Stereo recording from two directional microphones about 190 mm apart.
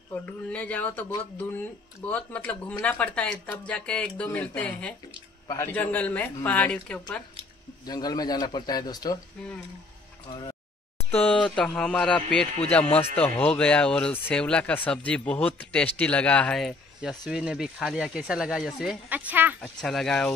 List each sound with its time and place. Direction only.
0.1 s speech: 10° left (ahead or behind)
7.8 s a man's voice: 20° left (ahead or behind)
10.2 s a man's voice: 25° left (ahead or behind)
11.0 s speech: 10° left (ahead or behind); by 19.5 s 10° right (ahead or behind)
19.6 s speech: 5° left (ahead or behind)